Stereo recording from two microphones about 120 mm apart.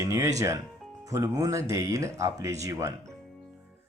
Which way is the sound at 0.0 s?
25° right (ahead or behind).